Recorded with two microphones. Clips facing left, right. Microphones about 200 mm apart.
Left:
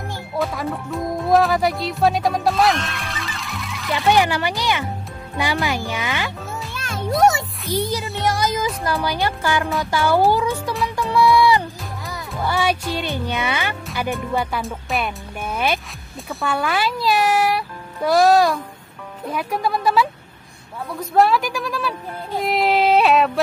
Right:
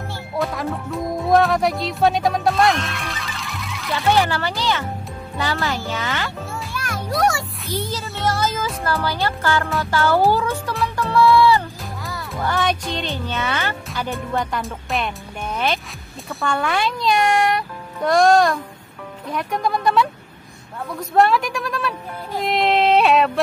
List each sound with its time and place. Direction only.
0.4 s speech: centre (ahead or behind)
3.9 s speech: 15° left (ahead or behind)
6.7 s children playing: 25° left (ahead or behind)
7.2 s music: 20° left (ahead or behind)
7.7 s speech: 15° left (ahead or behind)
11.0 s music: 15° left (ahead or behind)
12.1 s a child's voice: 10° left (ahead or behind)